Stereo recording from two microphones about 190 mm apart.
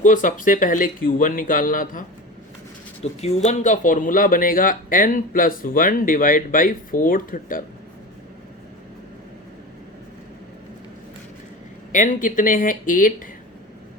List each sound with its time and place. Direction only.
0.0 s speech: 40° left (ahead or behind)
3.0 s speech: 35° left (ahead or behind)
11.9 s speech: 40° left (ahead or behind)